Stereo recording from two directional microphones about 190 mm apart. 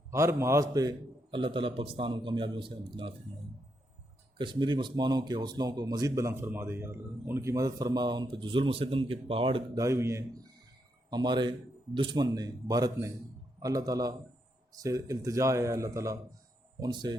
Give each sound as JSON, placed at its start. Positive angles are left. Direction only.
{"t": 0.1, "sound": "speech", "side_deg": -15}
{"t": 4.4, "sound": "a man's voice", "side_deg": -25}